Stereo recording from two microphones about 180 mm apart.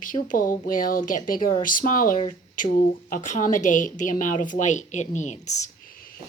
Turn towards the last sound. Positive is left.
turn(degrees=40)  # may be behind; listen again after turning